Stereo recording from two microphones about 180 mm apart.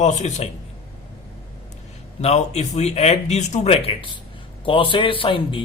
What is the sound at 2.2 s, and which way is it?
A man's voice, 35° left (ahead or behind).